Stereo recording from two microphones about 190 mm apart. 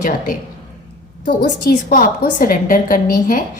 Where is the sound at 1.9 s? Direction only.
50° left (ahead or behind).